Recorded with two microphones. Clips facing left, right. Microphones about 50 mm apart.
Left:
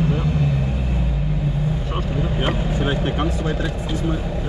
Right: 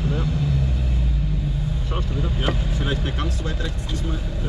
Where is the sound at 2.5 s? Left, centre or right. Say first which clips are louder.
Left 2 dB; left.